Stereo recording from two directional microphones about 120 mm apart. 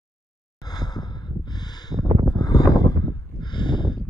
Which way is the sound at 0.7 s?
35° left (ahead or behind).